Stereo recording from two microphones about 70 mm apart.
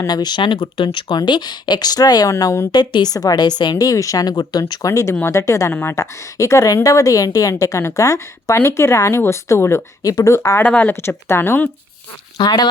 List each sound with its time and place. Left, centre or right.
0.1 s speech: left
2.3 s a woman's voice: left
2.7 s speech: left
4.9 s a woman's voice: left
10.0 s speech: left
10.3 s speech: left
10.6 s speech: left
11.3 s speech: left
12.4 s speech: left